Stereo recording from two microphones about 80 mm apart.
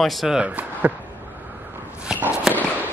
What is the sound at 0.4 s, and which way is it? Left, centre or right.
Speech, centre.